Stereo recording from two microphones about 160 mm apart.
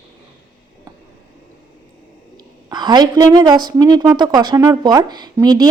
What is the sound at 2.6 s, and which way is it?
A woman's voice, 25° right (ahead or behind).